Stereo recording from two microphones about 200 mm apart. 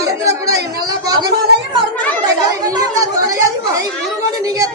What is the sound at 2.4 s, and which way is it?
Speech, 15° right (ahead or behind).